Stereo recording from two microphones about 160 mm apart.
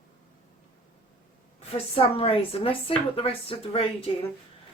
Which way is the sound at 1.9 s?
35° left (ahead or behind).